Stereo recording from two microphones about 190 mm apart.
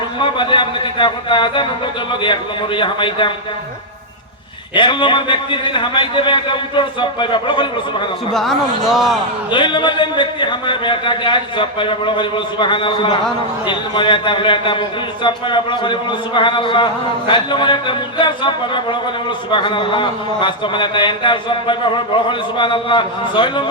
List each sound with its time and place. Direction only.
0.2 s a man's voice: 25° left (ahead or behind)
4.7 s a man's voice: 25° left (ahead or behind)
8.3 s speech: centre (ahead or behind)
9.5 s a man's voice: 25° left (ahead or behind)